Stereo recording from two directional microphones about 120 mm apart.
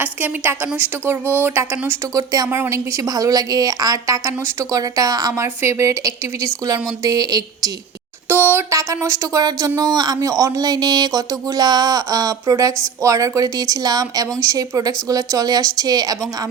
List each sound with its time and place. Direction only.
0.0 s a woman's voice: 15° right (ahead or behind); by 7.7 s 30° right (ahead or behind)
8.3 s speech: 15° right (ahead or behind); by 16.1 s 30° right (ahead or behind)